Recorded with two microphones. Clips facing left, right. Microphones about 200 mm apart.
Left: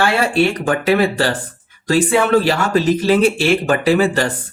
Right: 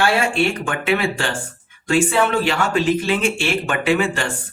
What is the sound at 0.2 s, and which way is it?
Speech, 40° left (ahead or behind).